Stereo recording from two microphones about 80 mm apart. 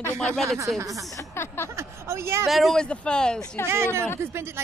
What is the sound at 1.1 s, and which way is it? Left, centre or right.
Speech, left.